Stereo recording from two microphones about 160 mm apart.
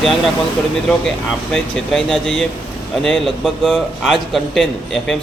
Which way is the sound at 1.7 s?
5° left (ahead or behind).